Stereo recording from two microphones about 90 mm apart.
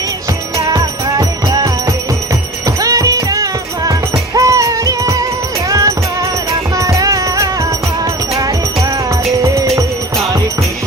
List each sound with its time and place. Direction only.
0.6 s music: 40° right (ahead or behind)